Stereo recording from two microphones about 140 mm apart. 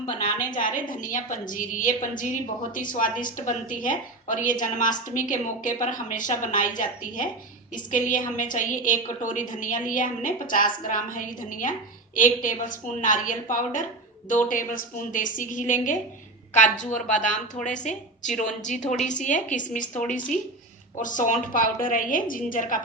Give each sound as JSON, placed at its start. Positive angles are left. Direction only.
{"t": 0.6, "sound": "a woman's voice", "side_deg": 75}